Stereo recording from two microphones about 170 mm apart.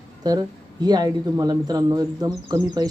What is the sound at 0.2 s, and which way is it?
Speech, 25° right (ahead or behind).